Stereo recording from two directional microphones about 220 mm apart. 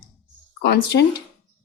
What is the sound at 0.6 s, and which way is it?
Speech, 45° left (ahead or behind).